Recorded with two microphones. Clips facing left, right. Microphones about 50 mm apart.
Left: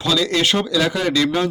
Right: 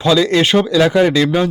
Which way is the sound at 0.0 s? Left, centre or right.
Right.